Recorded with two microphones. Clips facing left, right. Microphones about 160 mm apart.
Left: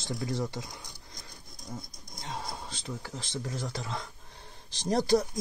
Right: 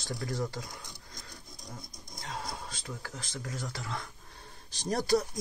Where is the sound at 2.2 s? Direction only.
20° left (ahead or behind).